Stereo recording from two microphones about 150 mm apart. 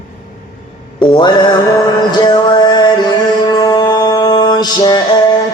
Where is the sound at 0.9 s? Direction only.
30° left (ahead or behind).